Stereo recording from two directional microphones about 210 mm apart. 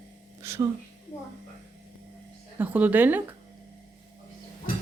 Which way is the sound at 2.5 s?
10° right (ahead or behind).